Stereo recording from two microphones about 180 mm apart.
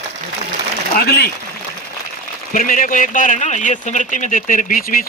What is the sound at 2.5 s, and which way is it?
Speech, 50° left (ahead or behind).